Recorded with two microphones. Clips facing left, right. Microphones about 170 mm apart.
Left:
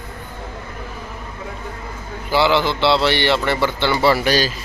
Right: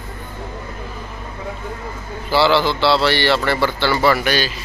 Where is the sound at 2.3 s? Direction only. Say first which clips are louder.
Right 1 dB; 15° left (ahead or behind); by 4.5 s 35° left (ahead or behind).